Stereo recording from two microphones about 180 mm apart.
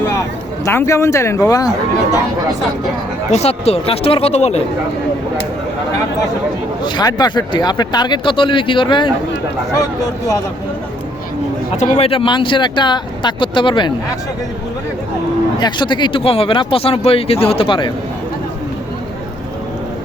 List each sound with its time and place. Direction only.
0.0 s speech: 15° left (ahead or behind)
3.3 s speech: 35° left (ahead or behind)
6.8 s speech: 25° left (ahead or behind)
11.8 s speech: 35° left (ahead or behind)
15.5 s speech: 25° left (ahead or behind)